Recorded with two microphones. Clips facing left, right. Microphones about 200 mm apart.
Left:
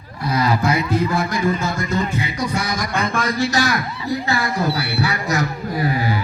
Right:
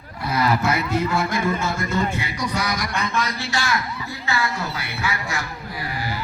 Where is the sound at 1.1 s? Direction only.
15° left (ahead or behind).